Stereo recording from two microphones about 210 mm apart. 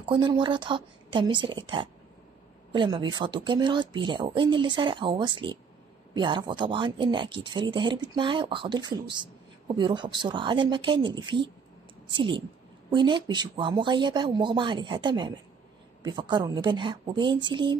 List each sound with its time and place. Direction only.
0.0 s speech: 25° right (ahead or behind)